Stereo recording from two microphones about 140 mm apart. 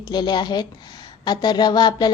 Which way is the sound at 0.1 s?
30° left (ahead or behind).